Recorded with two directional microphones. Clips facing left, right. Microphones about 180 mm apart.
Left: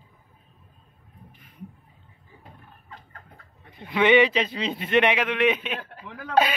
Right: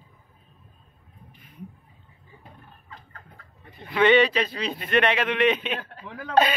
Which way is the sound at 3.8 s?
15° left (ahead or behind).